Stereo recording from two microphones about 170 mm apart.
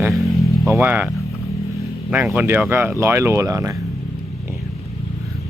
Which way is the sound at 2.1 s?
10° right (ahead or behind).